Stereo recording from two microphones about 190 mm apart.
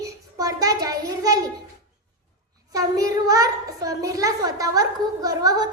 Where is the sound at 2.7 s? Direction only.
20° right (ahead or behind).